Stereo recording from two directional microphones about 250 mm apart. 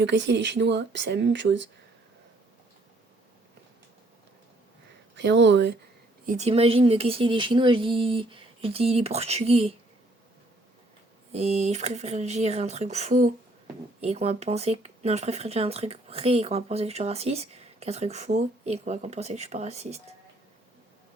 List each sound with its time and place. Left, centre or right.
0.0 s speech: right
5.1 s speech: right
6.2 s speech: right
11.3 s speech: right